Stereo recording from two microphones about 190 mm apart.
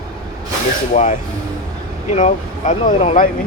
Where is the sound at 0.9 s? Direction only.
40° left (ahead or behind).